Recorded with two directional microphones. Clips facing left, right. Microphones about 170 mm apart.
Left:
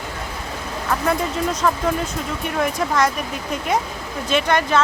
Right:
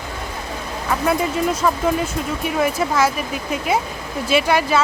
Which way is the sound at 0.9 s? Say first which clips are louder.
Right 2 dB; 5° right (ahead or behind).